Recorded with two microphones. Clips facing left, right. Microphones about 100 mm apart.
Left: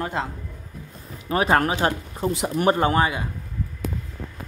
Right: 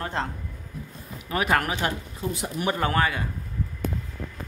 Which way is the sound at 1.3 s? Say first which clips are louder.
Left 4 dB; 30° left (ahead or behind).